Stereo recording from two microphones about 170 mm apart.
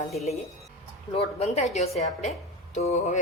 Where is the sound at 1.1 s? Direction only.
35° left (ahead or behind).